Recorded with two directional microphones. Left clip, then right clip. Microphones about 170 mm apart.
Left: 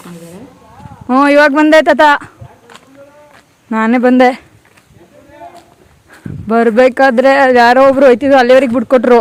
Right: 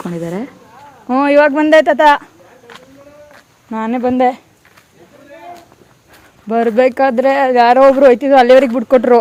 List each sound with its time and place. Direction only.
1.0 s speech: 20° left (ahead or behind)
3.7 s speech: 30° left (ahead or behind)
6.5 s speech: 25° left (ahead or behind)